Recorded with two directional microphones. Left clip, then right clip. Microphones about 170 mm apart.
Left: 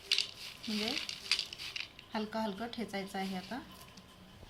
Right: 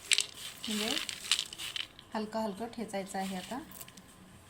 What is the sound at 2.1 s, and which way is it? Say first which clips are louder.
Speech: right 1 dB; 10° right (ahead or behind).